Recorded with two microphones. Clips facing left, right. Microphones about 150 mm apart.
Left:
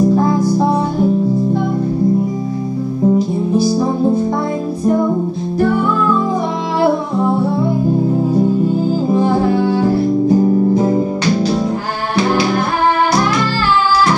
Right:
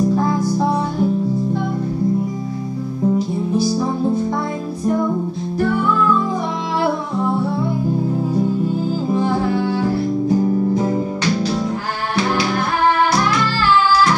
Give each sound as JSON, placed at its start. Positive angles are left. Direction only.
{"t": 0.1, "sound": "music", "side_deg": 30}
{"t": 4.8, "sound": "music", "side_deg": 30}
{"t": 9.1, "sound": "music", "side_deg": 30}